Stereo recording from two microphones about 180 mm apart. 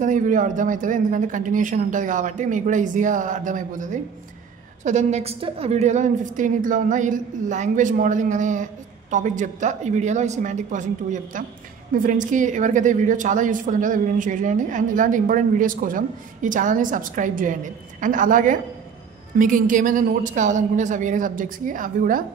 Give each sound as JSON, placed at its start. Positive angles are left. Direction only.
{"t": 0.0, "sound": "a woman's voice", "side_deg": -45}